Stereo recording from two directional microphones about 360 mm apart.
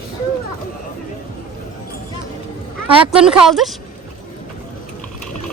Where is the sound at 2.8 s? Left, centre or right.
Centre.